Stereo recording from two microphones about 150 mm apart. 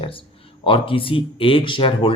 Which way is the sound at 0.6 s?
35° left (ahead or behind).